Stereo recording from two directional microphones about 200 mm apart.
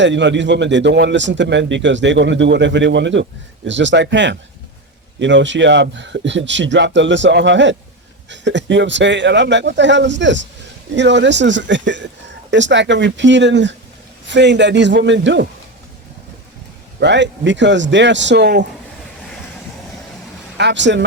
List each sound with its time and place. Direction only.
0.0 s speech: 65° right (ahead or behind)
17.0 s speech: 60° right (ahead or behind)
20.6 s speech: 60° right (ahead or behind)